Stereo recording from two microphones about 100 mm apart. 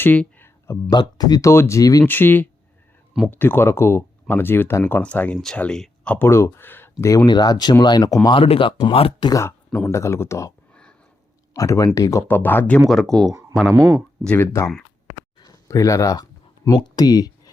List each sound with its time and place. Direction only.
0.0 s a sound: 20° left (ahead or behind)
0.9 s speech: 40° left (ahead or behind)
2.0 s speech: 20° left (ahead or behind)
6.1 s speech: 25° left (ahead or behind)
7.3 s speech: 45° left (ahead or behind)
8.3 s speech: 65° left (ahead or behind)
9.7 s speech: 25° left (ahead or behind)
11.5 s speech: 35° left (ahead or behind)
12.3 s speech: 20° left (ahead or behind)
12.9 s speech: centre (ahead or behind)
13.7 s speech: 35° right (ahead or behind)
14.3 s speech: 25° left (ahead or behind)
15.4 s a sound: 40° left (ahead or behind)
16.7 s speech: 45° left (ahead or behind)